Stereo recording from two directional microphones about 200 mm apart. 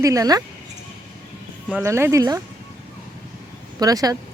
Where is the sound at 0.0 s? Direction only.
15° right (ahead or behind).